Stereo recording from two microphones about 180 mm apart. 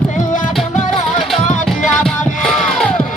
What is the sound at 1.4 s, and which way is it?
Music, 45° left (ahead or behind).